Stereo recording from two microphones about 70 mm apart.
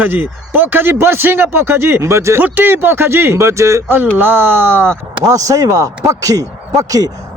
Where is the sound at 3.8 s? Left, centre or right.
Right.